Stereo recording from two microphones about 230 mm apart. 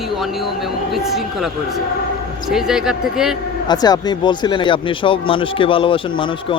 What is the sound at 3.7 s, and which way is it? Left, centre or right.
Speech, centre.